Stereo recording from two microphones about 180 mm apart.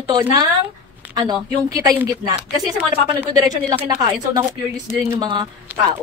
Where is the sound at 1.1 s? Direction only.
25° right (ahead or behind).